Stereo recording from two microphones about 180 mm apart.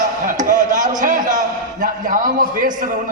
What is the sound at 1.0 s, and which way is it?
A man's voice, 45° right (ahead or behind).